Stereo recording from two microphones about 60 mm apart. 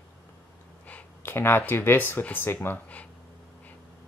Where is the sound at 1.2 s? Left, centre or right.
Left.